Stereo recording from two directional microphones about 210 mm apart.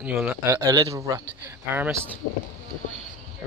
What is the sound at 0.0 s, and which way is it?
Speech, 5° right (ahead or behind).